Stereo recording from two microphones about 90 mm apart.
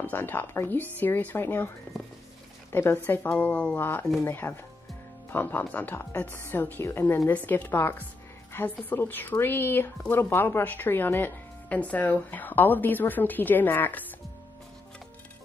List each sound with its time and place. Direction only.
0.0 s speech: 20° left (ahead or behind)
2.7 s speech: 25° left (ahead or behind)